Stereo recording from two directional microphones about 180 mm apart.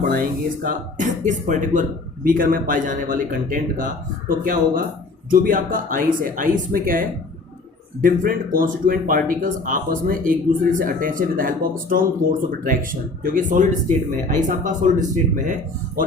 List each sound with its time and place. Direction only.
0.0 s speech: 50° right (ahead or behind)
8.0 s speech: 50° right (ahead or behind)